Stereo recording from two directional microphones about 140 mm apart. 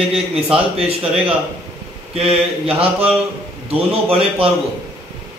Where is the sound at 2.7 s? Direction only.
45° right (ahead or behind).